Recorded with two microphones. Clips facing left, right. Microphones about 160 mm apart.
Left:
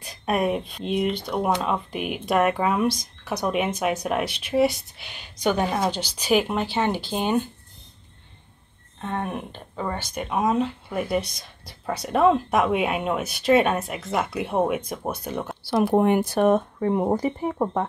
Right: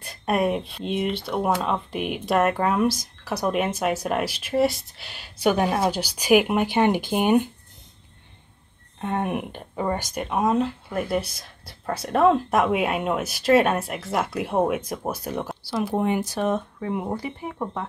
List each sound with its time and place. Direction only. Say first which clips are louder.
0.0 s speech: right 1 dB; centre (ahead or behind)
9.0 s speech: right 3 dB; 15° right (ahead or behind)
10.2 s speech: even; centre (ahead or behind)
15.7 s speech: left 5 dB; 55° left (ahead or behind)